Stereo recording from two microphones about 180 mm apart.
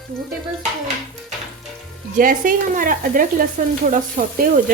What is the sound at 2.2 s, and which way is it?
Frying, 50° right (ahead or behind).